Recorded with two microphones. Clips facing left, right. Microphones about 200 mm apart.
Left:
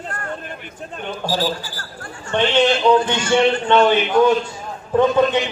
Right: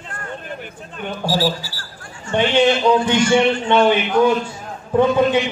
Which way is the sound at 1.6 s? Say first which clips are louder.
Left 3 dB; 55° left (ahead or behind).